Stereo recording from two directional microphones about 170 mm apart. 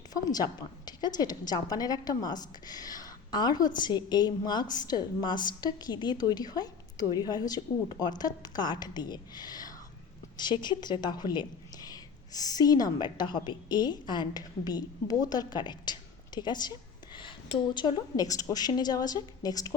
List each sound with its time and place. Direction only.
0.1 s a woman's voice: 25° left (ahead or behind)
17.7 s a woman's voice: 25° left (ahead or behind)